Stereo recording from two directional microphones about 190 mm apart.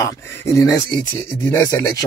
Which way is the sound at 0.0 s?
15° left (ahead or behind).